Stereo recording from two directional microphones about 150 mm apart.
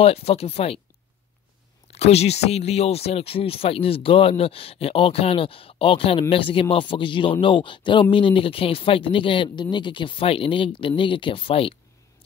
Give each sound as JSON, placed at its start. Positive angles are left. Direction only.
{"t": 0.0, "sound": "speech", "side_deg": 40}
{"t": 1.9, "sound": "speech", "side_deg": 45}